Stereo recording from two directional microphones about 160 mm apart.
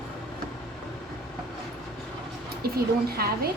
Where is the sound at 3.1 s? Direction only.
75° right (ahead or behind).